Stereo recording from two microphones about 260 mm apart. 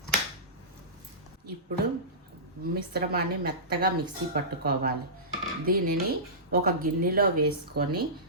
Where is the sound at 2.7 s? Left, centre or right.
Right.